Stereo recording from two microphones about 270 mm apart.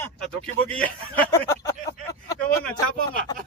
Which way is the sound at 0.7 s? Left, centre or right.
Centre.